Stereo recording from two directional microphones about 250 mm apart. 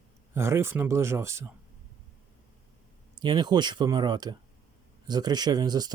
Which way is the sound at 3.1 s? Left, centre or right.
Centre.